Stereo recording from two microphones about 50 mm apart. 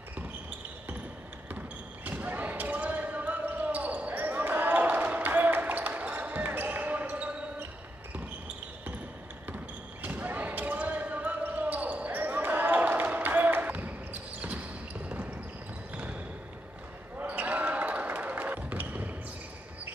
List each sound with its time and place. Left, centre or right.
2.0 s basketball bounce: right
10.0 s basketball bounce: right
17.2 s basketball bounce: right